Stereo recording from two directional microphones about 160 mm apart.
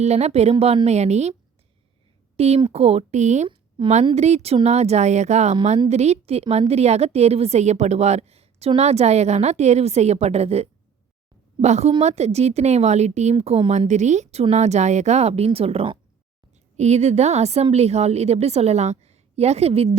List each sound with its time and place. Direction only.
0.0 s a woman's voice: 45° right (ahead or behind)